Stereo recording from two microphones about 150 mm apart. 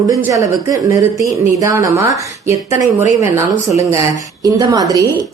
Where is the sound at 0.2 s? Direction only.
20° right (ahead or behind).